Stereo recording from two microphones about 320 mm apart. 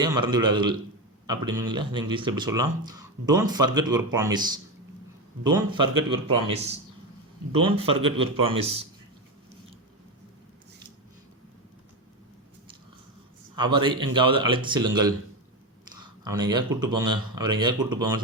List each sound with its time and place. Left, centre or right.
0.0 s a man's voice: centre
13.6 s speech: centre